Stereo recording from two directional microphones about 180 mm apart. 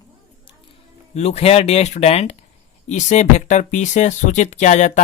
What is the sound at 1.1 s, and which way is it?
Speech, 35° left (ahead or behind).